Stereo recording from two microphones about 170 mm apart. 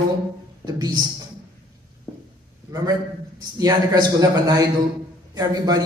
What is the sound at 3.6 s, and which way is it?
A man's voice, 20° right (ahead or behind).